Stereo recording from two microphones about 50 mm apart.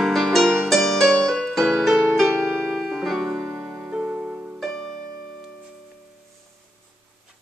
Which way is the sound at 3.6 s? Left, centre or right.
Right.